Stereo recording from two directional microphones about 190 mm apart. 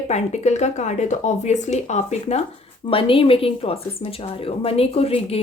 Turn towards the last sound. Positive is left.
turn(degrees=30)  # may be behind; listen again after turning